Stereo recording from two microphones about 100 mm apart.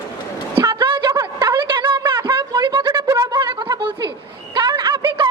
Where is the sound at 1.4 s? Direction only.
55° right (ahead or behind).